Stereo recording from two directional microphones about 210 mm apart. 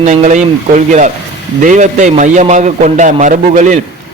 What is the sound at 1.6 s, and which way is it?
A man's voice, 35° right (ahead or behind).